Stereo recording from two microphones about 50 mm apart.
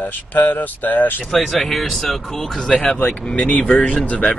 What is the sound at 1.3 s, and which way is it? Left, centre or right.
Speech, centre.